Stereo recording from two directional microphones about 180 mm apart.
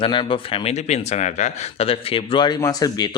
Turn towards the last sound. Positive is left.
turn(degrees=20)  # may be behind; listen again after turning